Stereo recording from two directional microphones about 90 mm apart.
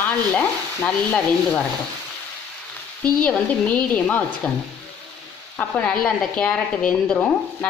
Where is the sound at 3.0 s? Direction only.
15° left (ahead or behind).